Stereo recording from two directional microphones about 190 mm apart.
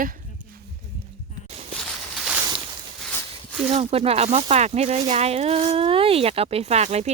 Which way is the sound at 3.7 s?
30° right (ahead or behind).